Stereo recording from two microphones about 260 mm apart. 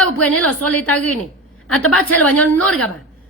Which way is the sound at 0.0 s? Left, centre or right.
Centre.